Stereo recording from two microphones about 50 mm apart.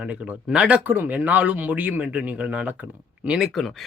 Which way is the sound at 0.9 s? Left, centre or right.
Right.